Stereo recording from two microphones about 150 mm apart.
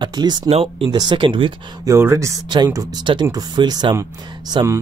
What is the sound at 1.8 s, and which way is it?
Speech, 20° right (ahead or behind).